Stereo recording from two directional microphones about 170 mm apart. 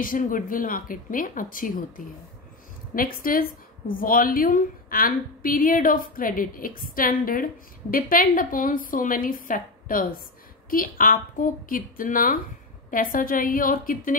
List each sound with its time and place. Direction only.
0.0 s a woman's voice: 55° left (ahead or behind)